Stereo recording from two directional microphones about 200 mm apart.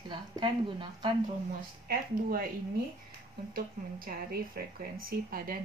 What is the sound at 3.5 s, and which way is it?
Speech, 45° right (ahead or behind).